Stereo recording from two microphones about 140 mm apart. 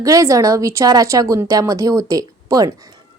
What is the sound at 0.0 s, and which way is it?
A woman's voice, 25° right (ahead or behind).